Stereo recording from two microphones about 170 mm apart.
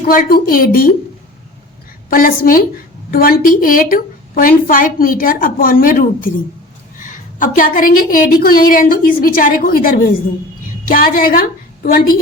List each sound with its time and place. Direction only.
0.0 s a woman's voice: 55° left (ahead or behind)
2.0 s a woman's voice: 60° left (ahead or behind)